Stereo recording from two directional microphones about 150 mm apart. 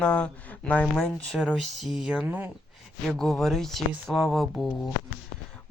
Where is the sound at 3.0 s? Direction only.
Centre (ahead or behind).